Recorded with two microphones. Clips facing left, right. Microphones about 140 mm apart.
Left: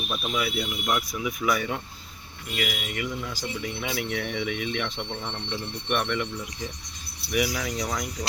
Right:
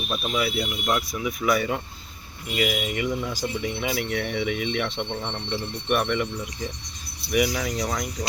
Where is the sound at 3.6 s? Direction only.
5° right (ahead or behind).